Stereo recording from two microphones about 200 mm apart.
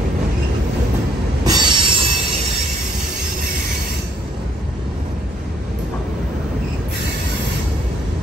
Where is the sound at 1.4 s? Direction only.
20° right (ahead or behind).